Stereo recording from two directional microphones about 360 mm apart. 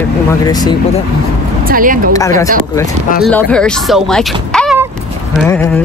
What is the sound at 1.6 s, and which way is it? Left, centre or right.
Speech, right.